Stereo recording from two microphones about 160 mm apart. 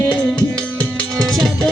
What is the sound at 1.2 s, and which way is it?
Music, centre (ahead or behind).